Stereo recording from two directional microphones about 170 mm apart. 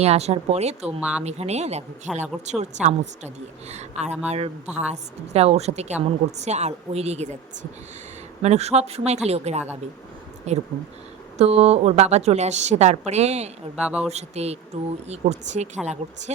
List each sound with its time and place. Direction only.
0.0 s a woman's voice: 40° right (ahead or behind)
2.1 s speech: centre (ahead or behind)
2.5 s a woman's voice: 45° right (ahead or behind)
8.4 s a woman's voice: 40° right (ahead or behind)
13.7 s speech: 5° right (ahead or behind)
14.1 s a woman's voice: 40° right (ahead or behind)